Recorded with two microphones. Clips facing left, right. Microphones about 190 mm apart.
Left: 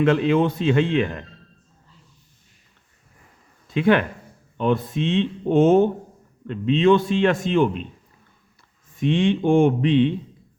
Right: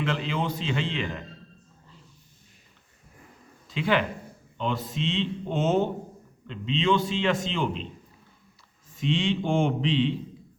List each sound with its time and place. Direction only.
0.0 s speech: 55° left (ahead or behind)
3.7 s speech: 55° left (ahead or behind)
9.0 s speech: 55° left (ahead or behind)